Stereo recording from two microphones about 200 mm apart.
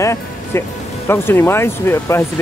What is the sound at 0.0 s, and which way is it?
Speech, 15° left (ahead or behind).